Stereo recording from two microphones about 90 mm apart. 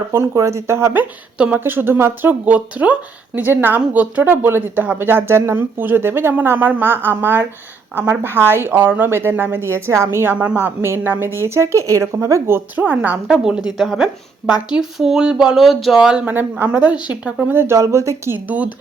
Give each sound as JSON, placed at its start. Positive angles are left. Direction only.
{"t": 0.1, "sound": "speech", "side_deg": -35}
{"t": 1.4, "sound": "speech", "side_deg": -20}
{"t": 2.4, "sound": "speech", "side_deg": -15}
{"t": 10.3, "sound": "a woman's voice", "side_deg": -15}
{"t": 17.5, "sound": "speech", "side_deg": -30}
{"t": 18.3, "sound": "a woman's voice", "side_deg": -15}